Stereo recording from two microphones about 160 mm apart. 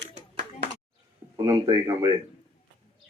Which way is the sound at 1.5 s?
20° right (ahead or behind).